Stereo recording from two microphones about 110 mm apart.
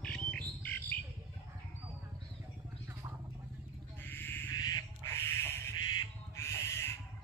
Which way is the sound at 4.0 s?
20° left (ahead or behind).